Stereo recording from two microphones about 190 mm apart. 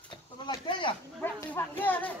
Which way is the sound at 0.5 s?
25° left (ahead or behind).